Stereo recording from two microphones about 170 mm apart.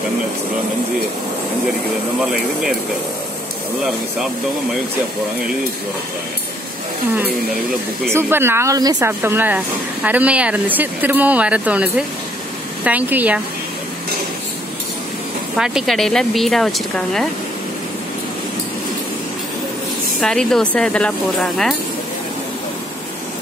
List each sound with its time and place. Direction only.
8.1 s speech: 15° right (ahead or behind)
15.5 s speech: 5° right (ahead or behind)
20.2 s speech: centre (ahead or behind)